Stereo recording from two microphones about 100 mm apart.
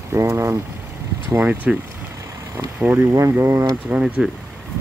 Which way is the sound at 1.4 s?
15° right (ahead or behind).